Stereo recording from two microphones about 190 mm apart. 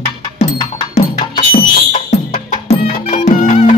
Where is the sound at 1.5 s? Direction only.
35° left (ahead or behind).